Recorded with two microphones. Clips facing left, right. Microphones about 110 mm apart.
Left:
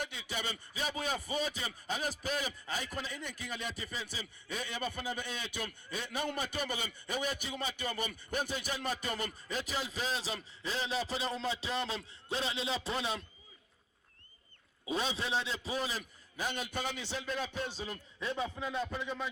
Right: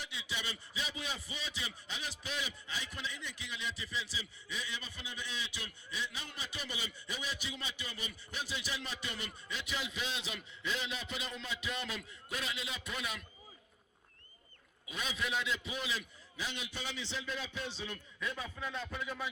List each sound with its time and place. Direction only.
0.0 s a man's voice: 50° left (ahead or behind); by 13.2 s 30° left (ahead or behind)
14.8 s a man's voice: 30° left (ahead or behind)
18.2 s speech: 30° left (ahead or behind)